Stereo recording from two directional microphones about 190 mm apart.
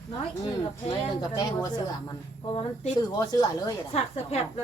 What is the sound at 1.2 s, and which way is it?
A woman's voice, 20° left (ahead or behind).